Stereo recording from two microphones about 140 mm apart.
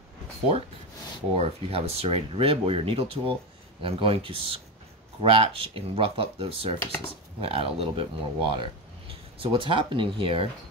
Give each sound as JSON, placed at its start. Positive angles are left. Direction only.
{"t": 1.3, "sound": "speech", "side_deg": -45}